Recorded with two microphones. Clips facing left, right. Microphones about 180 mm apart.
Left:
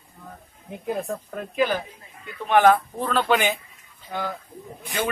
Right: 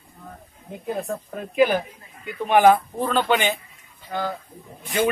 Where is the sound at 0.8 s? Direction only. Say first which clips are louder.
Even; centre (ahead or behind).